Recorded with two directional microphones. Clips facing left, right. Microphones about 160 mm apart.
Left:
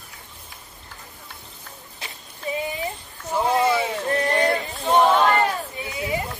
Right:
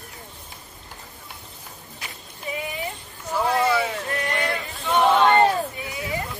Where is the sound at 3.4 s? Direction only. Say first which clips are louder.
Left 1 dB; 20° left (ahead or behind).